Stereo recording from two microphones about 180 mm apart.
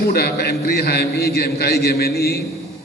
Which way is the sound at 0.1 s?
60° left (ahead or behind).